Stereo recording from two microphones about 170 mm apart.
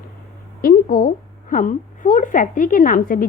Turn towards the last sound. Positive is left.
turn(degrees=55)  # may be behind; listen again after turning